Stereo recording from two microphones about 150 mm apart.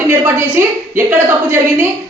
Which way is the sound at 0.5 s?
15° right (ahead or behind).